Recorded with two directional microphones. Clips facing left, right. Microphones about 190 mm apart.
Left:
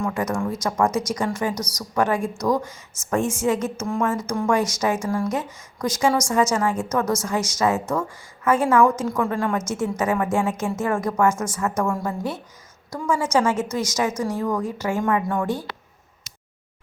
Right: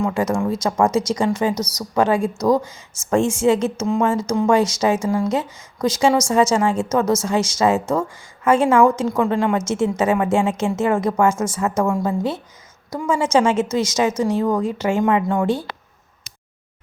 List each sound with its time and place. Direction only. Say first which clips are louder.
0.0 s speech: right 4 dB; 25° right (ahead or behind)